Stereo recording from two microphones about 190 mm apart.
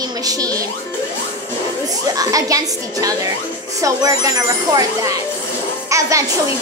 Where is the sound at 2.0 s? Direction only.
20° right (ahead or behind).